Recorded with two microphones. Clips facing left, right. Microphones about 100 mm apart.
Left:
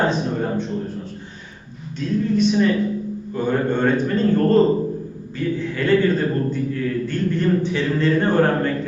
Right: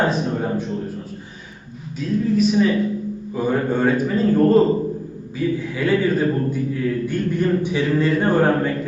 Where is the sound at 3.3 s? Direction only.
5° right (ahead or behind).